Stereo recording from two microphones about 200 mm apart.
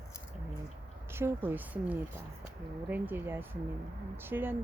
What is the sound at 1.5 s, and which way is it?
Speech, 10° right (ahead or behind).